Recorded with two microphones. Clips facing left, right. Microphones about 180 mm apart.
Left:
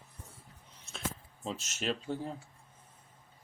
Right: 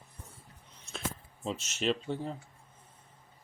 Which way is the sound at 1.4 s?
Centre (ahead or behind).